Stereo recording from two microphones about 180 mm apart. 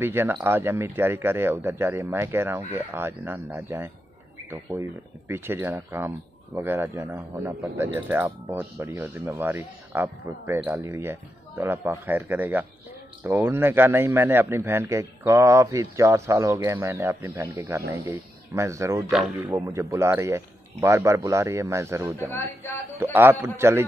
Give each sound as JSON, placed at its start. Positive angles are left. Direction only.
{"t": 0.0, "sound": "a man's voice", "side_deg": -10}
{"t": 19.0, "sound": "speech", "side_deg": 0}
{"t": 19.3, "sound": "a man's voice", "side_deg": -15}